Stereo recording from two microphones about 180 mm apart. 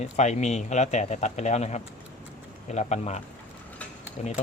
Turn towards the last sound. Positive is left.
turn(degrees=40)  # may be behind; listen again after turning